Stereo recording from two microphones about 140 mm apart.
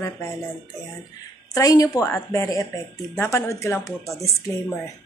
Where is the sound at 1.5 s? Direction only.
25° left (ahead or behind).